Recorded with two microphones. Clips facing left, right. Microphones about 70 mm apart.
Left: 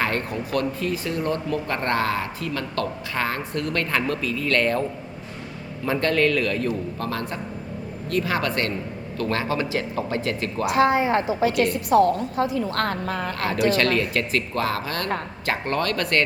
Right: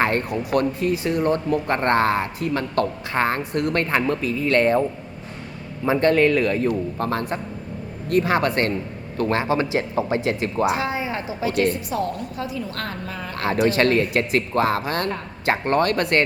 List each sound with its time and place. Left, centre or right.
0.5 s speech: right
10.8 s a woman's voice: left
11.5 s a woman's voice: right
11.9 s a woman's voice: left
13.7 s speech: right